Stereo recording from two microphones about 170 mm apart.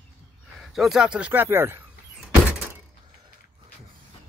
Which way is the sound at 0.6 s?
Centre (ahead or behind).